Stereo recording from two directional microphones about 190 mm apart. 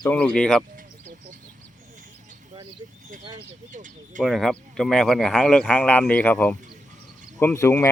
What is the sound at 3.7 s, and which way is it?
Speech, 40° right (ahead or behind).